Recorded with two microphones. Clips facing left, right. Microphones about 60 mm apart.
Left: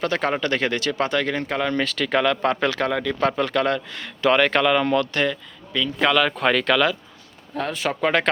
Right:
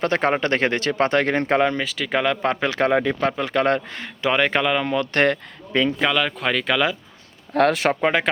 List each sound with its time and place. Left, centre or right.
0.0 s speech: right
1.8 s speech: centre; by 4.1 s right
4.2 s speech: centre
5.1 s speech: right
6.0 s speech: centre
7.5 s speech: right
8.0 s speech: centre